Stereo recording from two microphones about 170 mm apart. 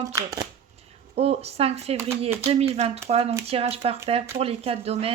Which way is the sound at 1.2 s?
40° right (ahead or behind).